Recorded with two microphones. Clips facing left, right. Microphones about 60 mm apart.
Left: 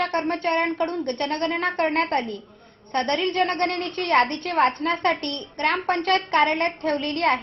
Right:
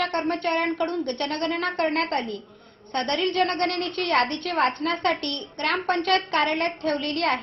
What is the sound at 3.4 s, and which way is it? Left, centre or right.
A woman's voice, centre.